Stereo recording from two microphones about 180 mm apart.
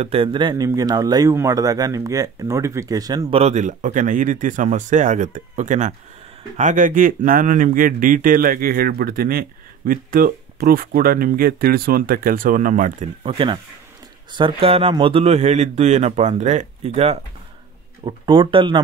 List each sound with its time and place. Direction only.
0.0 s speech: 30° right (ahead or behind); by 13.1 s 45° right (ahead or behind)
13.2 s speech: 30° right (ahead or behind)